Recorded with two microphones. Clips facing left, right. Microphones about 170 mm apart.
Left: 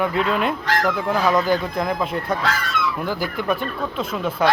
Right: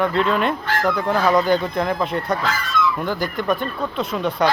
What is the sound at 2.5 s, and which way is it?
Goose, 70° left (ahead or behind).